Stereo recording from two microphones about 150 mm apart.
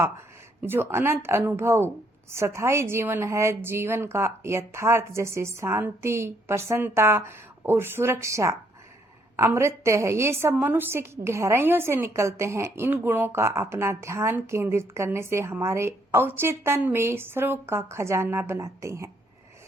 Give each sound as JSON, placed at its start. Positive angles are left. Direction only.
{"t": 0.6, "sound": "a woman's voice", "side_deg": -15}